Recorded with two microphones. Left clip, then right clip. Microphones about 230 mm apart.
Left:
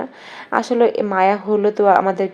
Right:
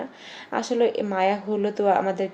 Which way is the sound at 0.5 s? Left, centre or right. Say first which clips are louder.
Left 7 dB; centre.